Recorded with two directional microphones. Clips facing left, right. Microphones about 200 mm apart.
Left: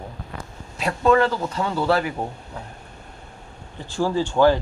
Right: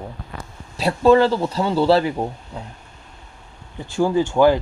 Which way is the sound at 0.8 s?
30° right (ahead or behind).